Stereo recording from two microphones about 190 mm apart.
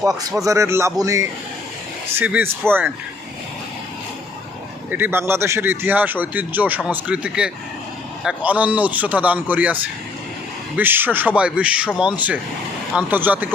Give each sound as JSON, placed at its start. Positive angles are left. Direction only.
{"t": 0.4, "sound": "speech", "side_deg": -15}
{"t": 4.9, "sound": "speech", "side_deg": -10}
{"t": 10.8, "sound": "speech", "side_deg": -10}